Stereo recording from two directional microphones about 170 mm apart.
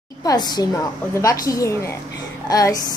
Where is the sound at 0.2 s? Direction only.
25° left (ahead or behind).